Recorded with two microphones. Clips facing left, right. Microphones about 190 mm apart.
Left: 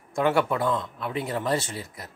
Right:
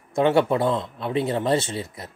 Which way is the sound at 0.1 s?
25° right (ahead or behind).